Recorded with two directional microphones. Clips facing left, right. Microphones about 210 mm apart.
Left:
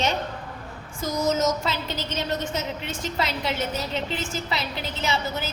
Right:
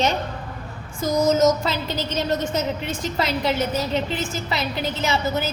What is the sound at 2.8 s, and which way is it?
Speech, 40° right (ahead or behind).